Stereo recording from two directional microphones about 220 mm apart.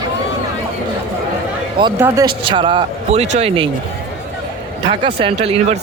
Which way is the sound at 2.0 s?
20° right (ahead or behind).